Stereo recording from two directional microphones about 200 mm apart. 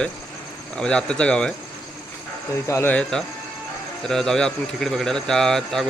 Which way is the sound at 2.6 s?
10° left (ahead or behind).